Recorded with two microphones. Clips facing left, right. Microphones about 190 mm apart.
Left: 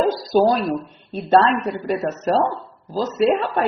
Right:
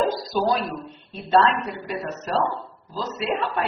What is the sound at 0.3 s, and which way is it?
A woman's voice, 45° left (ahead or behind).